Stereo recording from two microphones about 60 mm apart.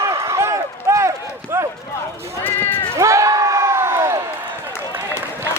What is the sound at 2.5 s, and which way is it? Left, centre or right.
Cat, left.